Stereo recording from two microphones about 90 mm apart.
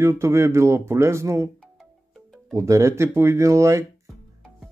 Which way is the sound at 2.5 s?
35° right (ahead or behind).